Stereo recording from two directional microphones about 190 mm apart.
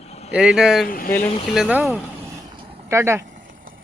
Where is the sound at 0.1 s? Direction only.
35° left (ahead or behind).